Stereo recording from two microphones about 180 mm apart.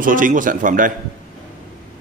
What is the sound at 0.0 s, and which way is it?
Speech, 50° right (ahead or behind).